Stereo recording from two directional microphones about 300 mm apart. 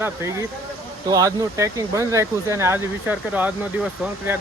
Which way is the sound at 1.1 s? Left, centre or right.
Centre.